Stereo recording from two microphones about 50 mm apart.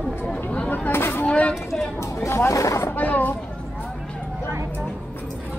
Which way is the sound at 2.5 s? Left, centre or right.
Left.